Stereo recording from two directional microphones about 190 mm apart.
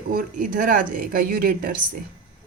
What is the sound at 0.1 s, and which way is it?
Speech, 45° right (ahead or behind).